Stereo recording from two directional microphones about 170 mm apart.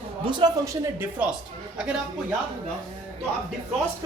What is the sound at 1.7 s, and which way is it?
Speech, 5° right (ahead or behind).